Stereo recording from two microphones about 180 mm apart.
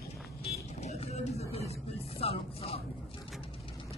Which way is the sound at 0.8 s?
35° left (ahead or behind).